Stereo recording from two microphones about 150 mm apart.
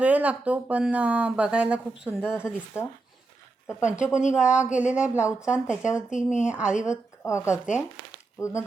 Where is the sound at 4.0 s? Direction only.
5° right (ahead or behind).